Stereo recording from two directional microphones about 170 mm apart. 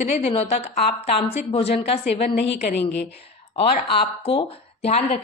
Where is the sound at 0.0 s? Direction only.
35° left (ahead or behind).